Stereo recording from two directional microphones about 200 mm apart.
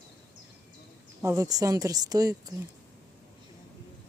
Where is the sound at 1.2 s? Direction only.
15° right (ahead or behind).